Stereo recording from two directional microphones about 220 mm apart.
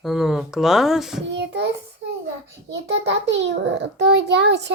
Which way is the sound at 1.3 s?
50° right (ahead or behind).